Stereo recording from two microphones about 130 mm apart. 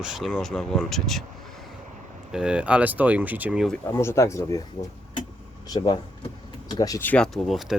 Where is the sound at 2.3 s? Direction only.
5° right (ahead or behind).